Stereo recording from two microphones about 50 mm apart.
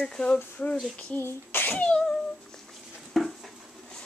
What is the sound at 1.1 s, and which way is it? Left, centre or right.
Speech, left.